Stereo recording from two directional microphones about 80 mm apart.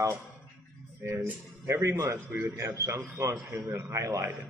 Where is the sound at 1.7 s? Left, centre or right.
Right.